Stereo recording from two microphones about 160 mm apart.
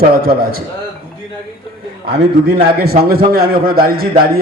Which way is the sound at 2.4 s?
75° right (ahead or behind).